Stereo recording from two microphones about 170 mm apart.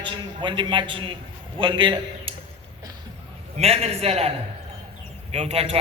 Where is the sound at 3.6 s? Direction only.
35° right (ahead or behind).